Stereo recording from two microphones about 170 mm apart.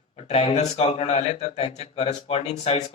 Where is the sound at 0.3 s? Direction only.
35° left (ahead or behind).